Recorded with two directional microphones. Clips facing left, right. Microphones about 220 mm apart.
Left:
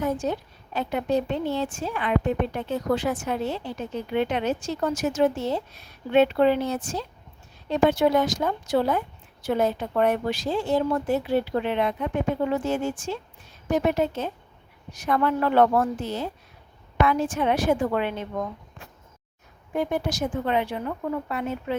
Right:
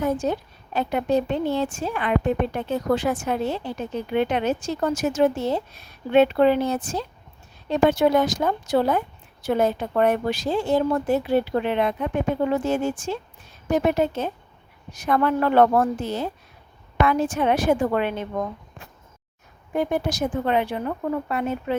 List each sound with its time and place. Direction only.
0.0 s a woman's voice: 50° right (ahead or behind)
19.7 s a woman's voice: 50° right (ahead or behind)